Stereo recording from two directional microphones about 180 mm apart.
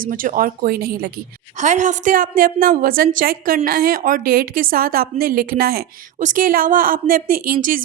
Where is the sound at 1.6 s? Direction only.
45° right (ahead or behind).